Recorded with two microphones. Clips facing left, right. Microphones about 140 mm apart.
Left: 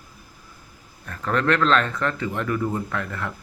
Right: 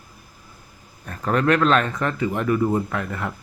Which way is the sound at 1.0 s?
20° right (ahead or behind).